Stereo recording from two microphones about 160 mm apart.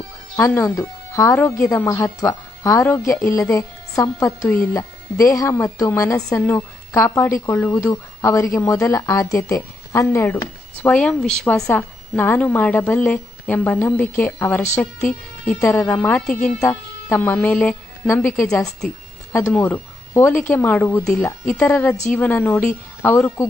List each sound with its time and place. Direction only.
0.3 s speech: 15° left (ahead or behind)
4.4 s speech: 10° left (ahead or behind)
4.7 s a woman's voice: 20° left (ahead or behind); by 18.9 s 5° left (ahead or behind)
19.3 s speech: 15° left (ahead or behind)